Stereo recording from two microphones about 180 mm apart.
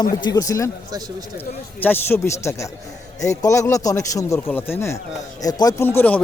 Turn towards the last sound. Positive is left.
turn(degrees=10)  # may be behind; listen again after turning